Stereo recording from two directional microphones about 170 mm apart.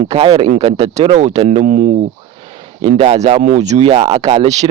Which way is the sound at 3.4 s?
45° right (ahead or behind).